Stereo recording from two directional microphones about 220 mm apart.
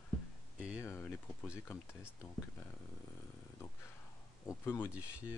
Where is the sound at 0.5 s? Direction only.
5° right (ahead or behind).